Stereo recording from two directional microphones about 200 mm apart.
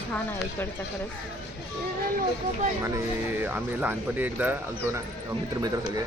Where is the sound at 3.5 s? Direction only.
5° right (ahead or behind).